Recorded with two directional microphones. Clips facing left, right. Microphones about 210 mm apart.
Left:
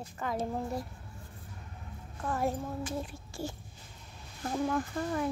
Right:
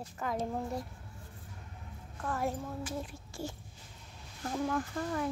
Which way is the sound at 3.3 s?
30° left (ahead or behind).